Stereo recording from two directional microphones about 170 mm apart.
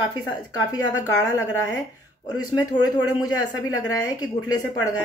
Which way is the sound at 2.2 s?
25° left (ahead or behind).